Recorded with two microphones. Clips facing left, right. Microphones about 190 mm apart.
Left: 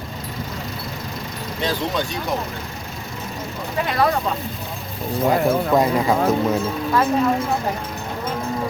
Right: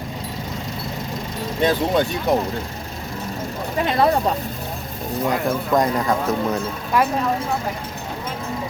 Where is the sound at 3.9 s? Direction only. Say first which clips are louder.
Right 2 dB; 25° right (ahead or behind).